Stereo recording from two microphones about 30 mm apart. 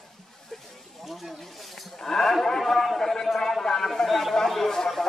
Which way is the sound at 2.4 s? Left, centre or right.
Centre.